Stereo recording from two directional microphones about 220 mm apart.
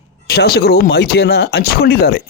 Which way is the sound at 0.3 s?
45° left (ahead or behind).